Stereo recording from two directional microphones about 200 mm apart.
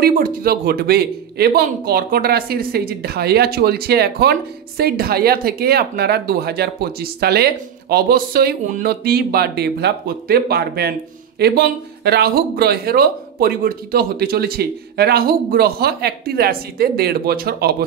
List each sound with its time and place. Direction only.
0.0 s speech: 50° right (ahead or behind)